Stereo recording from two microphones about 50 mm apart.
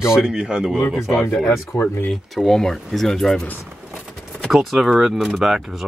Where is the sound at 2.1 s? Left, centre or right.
Centre.